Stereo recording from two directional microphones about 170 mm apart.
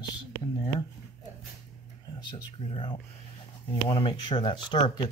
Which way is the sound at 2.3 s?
30° left (ahead or behind).